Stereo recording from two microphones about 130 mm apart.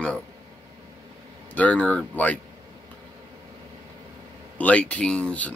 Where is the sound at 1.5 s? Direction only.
10° left (ahead or behind).